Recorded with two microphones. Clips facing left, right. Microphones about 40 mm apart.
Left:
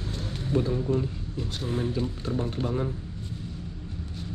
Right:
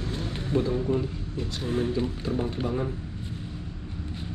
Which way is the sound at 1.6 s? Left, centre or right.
Centre.